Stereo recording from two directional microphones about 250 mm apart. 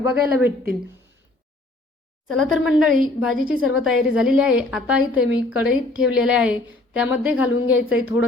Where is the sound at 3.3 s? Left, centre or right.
Right.